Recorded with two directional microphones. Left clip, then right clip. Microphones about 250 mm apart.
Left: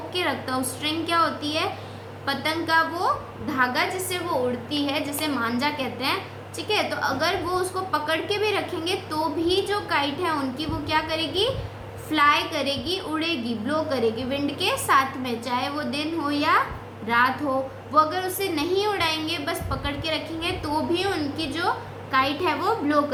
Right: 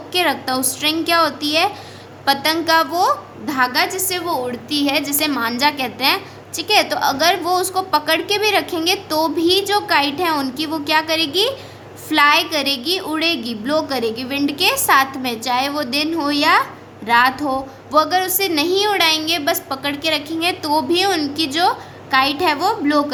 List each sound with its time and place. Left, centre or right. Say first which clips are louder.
0.1 s a woman's voice: right 9 dB; right